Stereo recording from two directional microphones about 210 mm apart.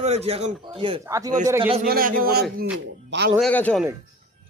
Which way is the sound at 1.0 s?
15° right (ahead or behind).